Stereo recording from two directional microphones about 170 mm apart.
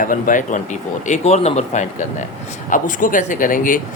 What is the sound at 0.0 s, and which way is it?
Speech, 50° left (ahead or behind).